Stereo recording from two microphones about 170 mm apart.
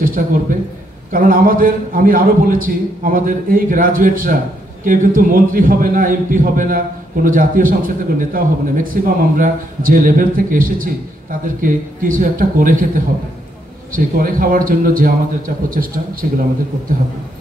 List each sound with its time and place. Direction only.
0.0 s a man's voice: 55° right (ahead or behind)